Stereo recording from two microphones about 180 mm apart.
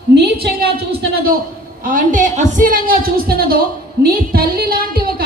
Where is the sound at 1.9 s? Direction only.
45° right (ahead or behind).